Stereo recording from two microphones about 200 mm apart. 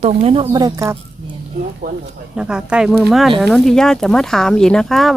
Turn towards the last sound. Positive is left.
turn(degrees=0)  # may be behind; listen again after turning